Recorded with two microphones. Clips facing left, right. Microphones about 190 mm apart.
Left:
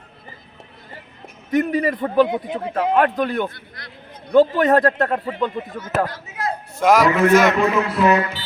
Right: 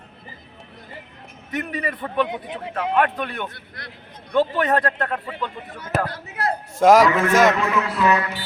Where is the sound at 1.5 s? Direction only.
40° left (ahead or behind).